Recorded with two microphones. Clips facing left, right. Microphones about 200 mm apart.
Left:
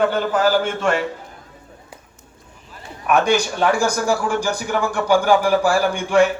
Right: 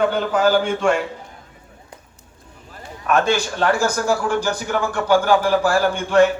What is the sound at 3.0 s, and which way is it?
A man's voice, 15° left (ahead or behind).